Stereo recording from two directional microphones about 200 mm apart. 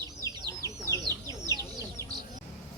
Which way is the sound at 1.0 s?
20° right (ahead or behind).